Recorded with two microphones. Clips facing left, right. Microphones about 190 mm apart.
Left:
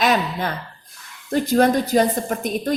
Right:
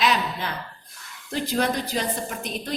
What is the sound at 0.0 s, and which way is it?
Gasp, 45° left (ahead or behind).